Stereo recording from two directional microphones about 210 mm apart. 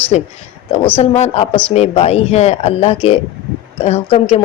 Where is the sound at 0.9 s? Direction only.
30° left (ahead or behind).